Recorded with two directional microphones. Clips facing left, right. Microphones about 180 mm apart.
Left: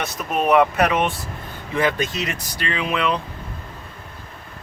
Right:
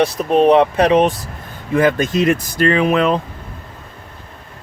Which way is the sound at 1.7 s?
50° right (ahead or behind).